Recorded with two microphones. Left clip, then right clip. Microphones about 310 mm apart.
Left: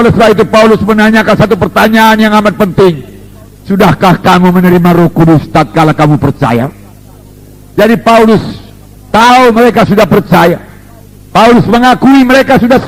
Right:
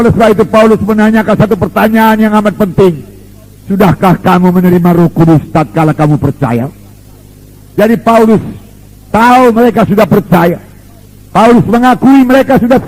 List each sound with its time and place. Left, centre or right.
0.0 s a man's voice: left
7.8 s a man's voice: left